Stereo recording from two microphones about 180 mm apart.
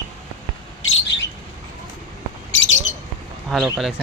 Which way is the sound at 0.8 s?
90° left.